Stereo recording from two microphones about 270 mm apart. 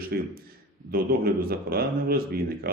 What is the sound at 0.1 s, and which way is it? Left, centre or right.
A man's voice, right.